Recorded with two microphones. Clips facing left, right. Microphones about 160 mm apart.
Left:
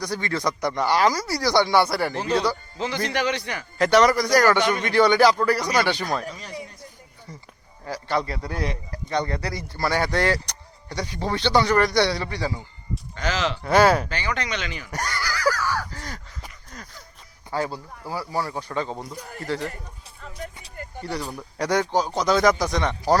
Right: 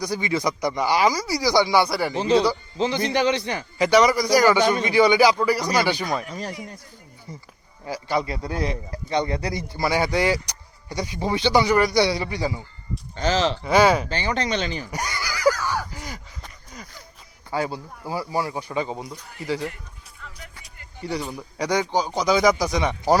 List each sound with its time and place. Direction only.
0.1 s speech: 10° right (ahead or behind)
2.7 s a man's voice: 25° right (ahead or behind)
3.8 s speech: centre (ahead or behind)
7.9 s speech: 5° right (ahead or behind)
8.3 s speech: 20° right (ahead or behind)
13.1 s speech: 30° right (ahead or behind)
13.7 s speech: centre (ahead or behind)
14.1 s speech: 30° right (ahead or behind)
15.0 s a sound: 15° right (ahead or behind)
16.7 s speech: centre (ahead or behind)
20.2 s a sound: 35° left (ahead or behind)
21.1 s speech: centre (ahead or behind)